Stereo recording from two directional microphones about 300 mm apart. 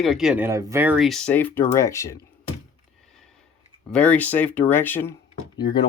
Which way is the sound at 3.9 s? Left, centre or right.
Centre.